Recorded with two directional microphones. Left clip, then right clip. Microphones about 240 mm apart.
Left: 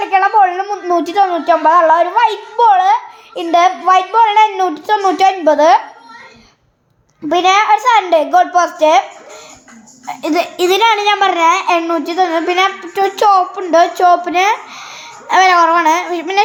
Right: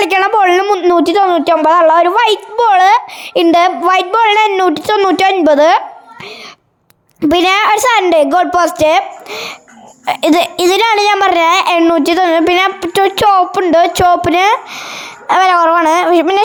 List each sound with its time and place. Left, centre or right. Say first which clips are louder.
0.0 s a woman's voice: right 1 dB; right
7.2 s a child's voice: right 1 dB; right